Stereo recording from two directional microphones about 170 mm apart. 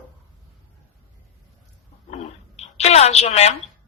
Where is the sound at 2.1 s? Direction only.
40° left (ahead or behind).